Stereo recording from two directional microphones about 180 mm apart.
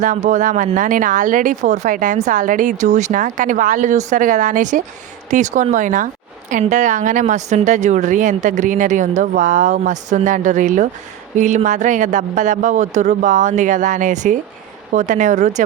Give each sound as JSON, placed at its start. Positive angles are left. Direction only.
{"t": 0.0, "sound": "speech", "side_deg": -45}